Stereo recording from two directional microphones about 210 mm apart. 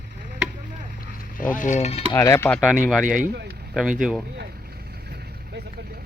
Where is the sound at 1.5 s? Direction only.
35° left (ahead or behind).